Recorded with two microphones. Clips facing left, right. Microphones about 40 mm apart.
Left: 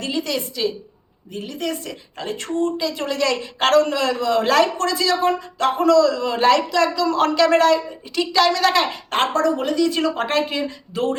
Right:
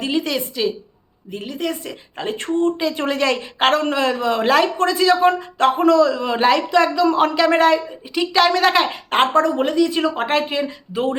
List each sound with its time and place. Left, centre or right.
0.0 s a woman's voice: right
9.7 s speech: centre